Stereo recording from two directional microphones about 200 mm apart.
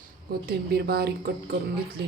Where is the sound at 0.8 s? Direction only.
50° right (ahead or behind).